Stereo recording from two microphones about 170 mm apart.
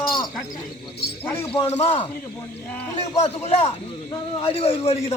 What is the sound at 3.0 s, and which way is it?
A man's voice, 40° left (ahead or behind).